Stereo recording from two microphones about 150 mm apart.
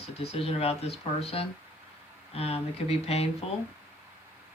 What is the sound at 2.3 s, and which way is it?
Speech, 40° left (ahead or behind).